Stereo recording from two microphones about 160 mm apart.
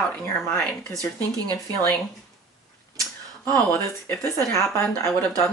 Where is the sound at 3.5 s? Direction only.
15° left (ahead or behind).